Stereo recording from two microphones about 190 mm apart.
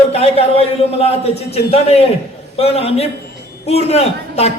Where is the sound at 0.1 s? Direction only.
35° left (ahead or behind).